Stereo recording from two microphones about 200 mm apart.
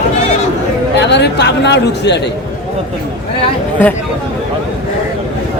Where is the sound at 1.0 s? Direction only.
60° left (ahead or behind).